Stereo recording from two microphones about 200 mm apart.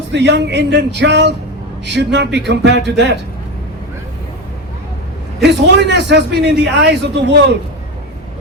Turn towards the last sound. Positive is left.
turn(degrees=-60)  # may be behind; listen again after turning